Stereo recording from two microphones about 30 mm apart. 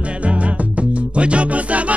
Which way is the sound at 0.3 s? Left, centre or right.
Right.